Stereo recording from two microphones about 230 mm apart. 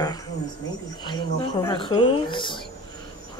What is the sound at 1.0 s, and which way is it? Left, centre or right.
Speech, centre.